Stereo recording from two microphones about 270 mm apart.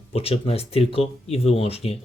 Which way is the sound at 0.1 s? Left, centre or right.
Left.